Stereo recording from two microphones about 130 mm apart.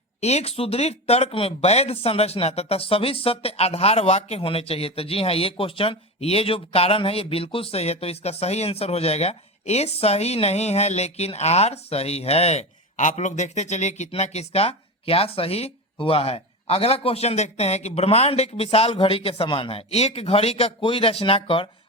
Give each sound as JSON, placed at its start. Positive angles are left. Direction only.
{"t": 0.2, "sound": "speech", "side_deg": 55}